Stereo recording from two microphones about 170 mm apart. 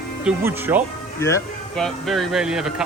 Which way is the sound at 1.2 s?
15° left (ahead or behind).